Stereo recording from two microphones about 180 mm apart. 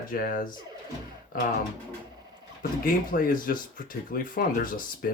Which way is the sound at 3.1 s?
50° left (ahead or behind).